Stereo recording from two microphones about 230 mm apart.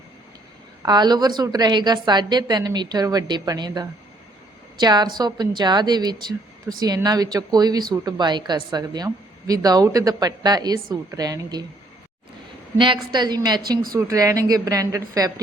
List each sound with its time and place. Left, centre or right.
0.8 s a woman's voice: centre
12.7 s a woman's voice: right